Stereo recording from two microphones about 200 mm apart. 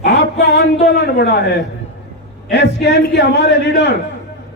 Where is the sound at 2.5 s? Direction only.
60° left (ahead or behind).